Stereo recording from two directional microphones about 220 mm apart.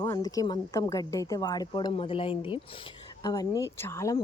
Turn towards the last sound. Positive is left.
turn(degrees=15)  # may be behind; listen again after turning